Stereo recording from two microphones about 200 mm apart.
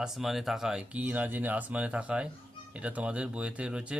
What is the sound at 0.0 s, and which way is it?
Speech, centre (ahead or behind).